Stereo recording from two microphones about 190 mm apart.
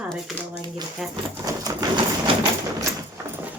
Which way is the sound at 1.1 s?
20° right (ahead or behind).